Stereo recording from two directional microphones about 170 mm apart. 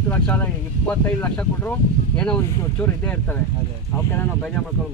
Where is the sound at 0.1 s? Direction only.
10° left (ahead or behind).